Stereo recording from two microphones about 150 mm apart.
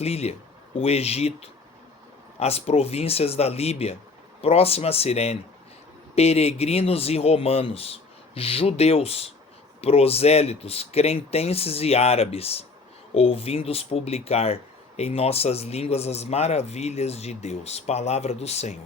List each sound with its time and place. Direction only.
0.0 s speech: 45° left (ahead or behind)